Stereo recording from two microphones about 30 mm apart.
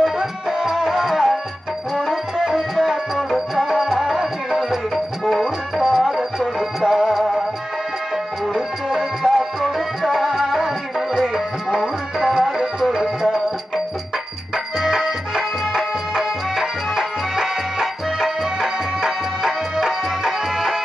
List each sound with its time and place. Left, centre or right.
0.0 s music: centre
8.5 s music: centre
11.1 s music: right
14.8 s music: centre